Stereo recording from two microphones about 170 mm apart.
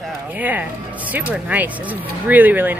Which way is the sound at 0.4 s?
10° right (ahead or behind).